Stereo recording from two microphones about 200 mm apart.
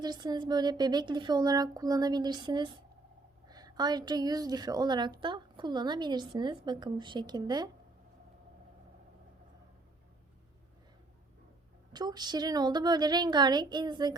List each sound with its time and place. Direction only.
0.0 s a woman's voice: 20° right (ahead or behind)
11.9 s a woman's voice: 20° right (ahead or behind)